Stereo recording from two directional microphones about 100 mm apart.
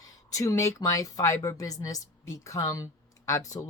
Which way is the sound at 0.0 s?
35° left (ahead or behind).